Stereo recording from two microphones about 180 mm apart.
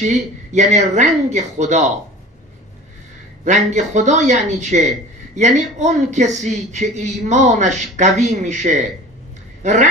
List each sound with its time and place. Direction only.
0.0 s a man's voice: 40° right (ahead or behind)
3.4 s a man's voice: 40° right (ahead or behind)